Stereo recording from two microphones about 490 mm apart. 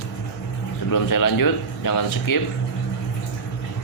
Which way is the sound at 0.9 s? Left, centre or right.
Left.